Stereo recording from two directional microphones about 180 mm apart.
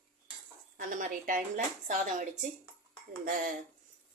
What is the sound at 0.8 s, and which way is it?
Speech, 45° right (ahead or behind).